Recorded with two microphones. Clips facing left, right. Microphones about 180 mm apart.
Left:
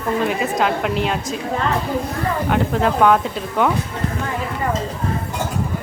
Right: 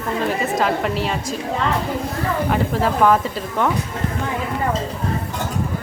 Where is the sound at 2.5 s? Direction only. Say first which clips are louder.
Left 3 dB; centre (ahead or behind).